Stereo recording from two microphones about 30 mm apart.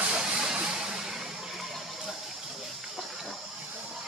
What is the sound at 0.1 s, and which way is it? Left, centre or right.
Music, right.